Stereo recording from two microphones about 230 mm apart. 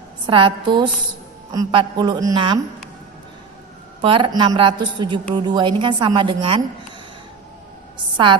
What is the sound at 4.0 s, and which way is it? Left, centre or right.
A woman's voice, right.